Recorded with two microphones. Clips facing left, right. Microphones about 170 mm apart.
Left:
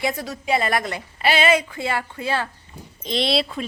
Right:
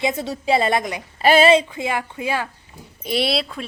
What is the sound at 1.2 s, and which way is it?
Speech, 40° right (ahead or behind).